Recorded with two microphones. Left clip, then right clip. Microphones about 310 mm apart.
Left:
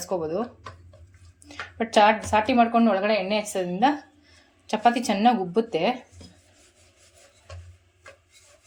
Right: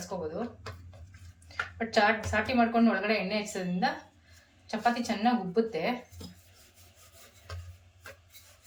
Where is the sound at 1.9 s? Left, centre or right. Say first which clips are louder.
Left 8 dB; centre.